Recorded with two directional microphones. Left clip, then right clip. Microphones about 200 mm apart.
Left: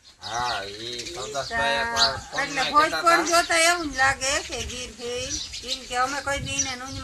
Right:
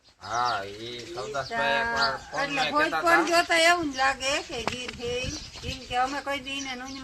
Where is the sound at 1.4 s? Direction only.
15° right (ahead or behind).